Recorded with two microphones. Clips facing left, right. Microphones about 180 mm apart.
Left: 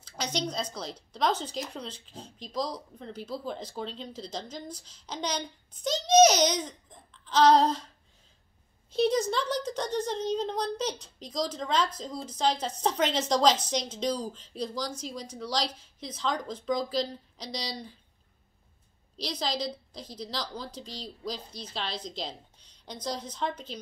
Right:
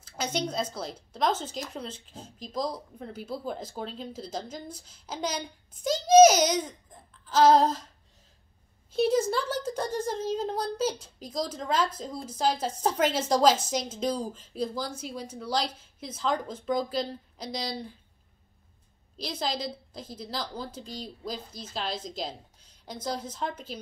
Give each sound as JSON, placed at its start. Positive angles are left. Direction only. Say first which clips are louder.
{"t": 0.0, "sound": "a woman's voice", "louder": "right 2 dB", "side_deg": -5}
{"t": 8.9, "sound": "a woman's voice", "louder": "right 1 dB", "side_deg": -5}
{"t": 19.1, "sound": "speech", "louder": "even", "side_deg": -5}
{"t": 20.8, "sound": "speech", "louder": "right 2 dB", "side_deg": -50}
{"t": 21.7, "sound": "a woman's voice", "louder": "right 2 dB", "side_deg": -5}